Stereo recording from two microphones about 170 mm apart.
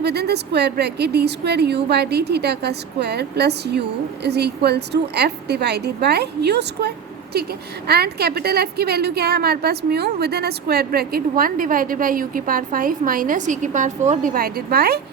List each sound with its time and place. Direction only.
0.0 s a woman's voice: 75° right (ahead or behind)
7.3 s a woman's voice: 65° right (ahead or behind)